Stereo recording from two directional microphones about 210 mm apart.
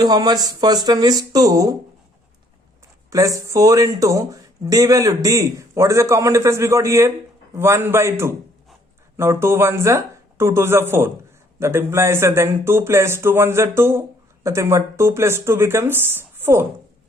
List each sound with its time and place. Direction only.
0.0 s speech: 20° right (ahead or behind)
3.1 s speech: 15° right (ahead or behind)